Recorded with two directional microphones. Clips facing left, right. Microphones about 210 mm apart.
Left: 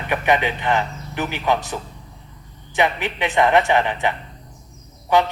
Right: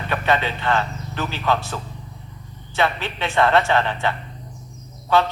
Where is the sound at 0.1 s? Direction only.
15° left (ahead or behind).